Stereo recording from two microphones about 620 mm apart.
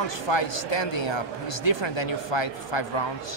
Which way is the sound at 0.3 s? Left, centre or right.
Left.